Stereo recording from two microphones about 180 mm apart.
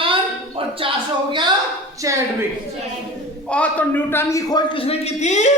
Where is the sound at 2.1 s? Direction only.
15° right (ahead or behind).